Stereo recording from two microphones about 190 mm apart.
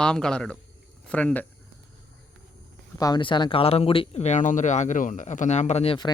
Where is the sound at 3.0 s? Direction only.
20° left (ahead or behind).